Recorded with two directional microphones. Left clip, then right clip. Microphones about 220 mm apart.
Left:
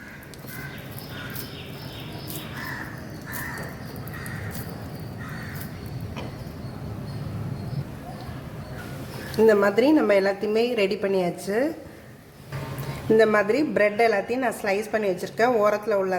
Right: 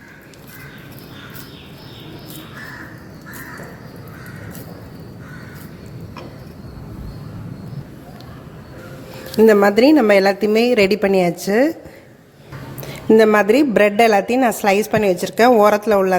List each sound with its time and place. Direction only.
9.3 s a woman's voice: 35° right (ahead or behind)
13.1 s a woman's voice: 35° right (ahead or behind)